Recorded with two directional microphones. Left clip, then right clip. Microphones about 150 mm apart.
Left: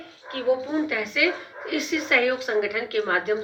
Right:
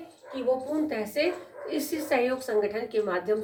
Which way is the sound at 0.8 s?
25° right (ahead or behind).